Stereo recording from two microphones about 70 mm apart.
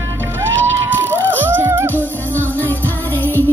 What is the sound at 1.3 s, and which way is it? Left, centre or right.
Music, right.